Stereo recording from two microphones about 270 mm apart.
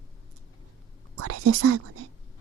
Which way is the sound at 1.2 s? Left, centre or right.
Right.